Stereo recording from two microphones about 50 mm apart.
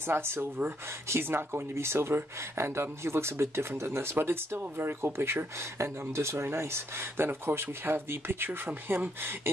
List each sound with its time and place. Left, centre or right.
0.0 s speech: right